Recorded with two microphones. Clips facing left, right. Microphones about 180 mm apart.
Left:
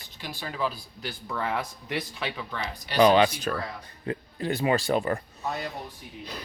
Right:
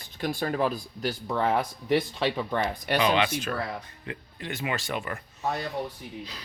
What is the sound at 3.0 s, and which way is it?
Speech, 40° left (ahead or behind).